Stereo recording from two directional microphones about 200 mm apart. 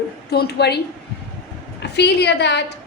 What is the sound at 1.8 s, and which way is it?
Speech, 55° left (ahead or behind).